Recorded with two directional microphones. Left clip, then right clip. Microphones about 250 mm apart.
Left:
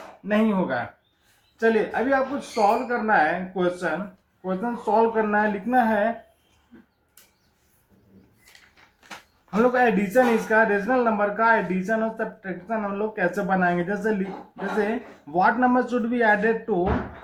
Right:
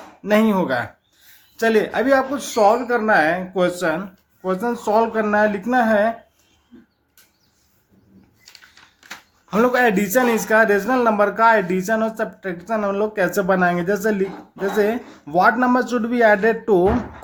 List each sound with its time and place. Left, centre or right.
0.3 s speech: right
9.5 s speech: right